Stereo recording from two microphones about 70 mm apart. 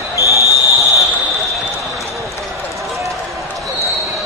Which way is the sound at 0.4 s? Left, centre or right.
Left.